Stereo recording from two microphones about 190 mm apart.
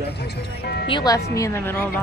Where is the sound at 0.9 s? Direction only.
20° left (ahead or behind).